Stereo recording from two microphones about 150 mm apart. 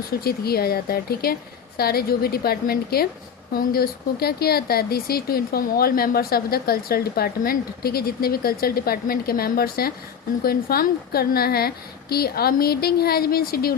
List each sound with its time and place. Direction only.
0.3 s speech: 90° left